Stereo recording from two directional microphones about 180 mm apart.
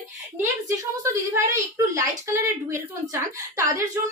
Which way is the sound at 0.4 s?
15° right (ahead or behind).